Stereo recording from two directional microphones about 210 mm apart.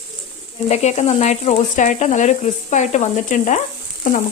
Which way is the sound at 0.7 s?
30° left (ahead or behind).